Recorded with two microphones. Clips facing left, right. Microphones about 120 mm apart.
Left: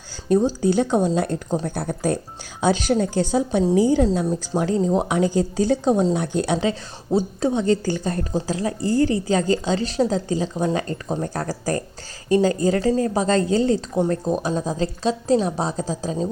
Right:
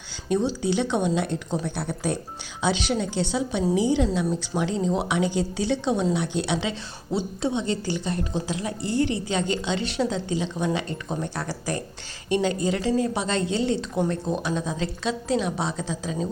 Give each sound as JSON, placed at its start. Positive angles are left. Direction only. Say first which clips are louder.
{"t": 0.3, "sound": "speech", "louder": "left 5 dB", "side_deg": 40}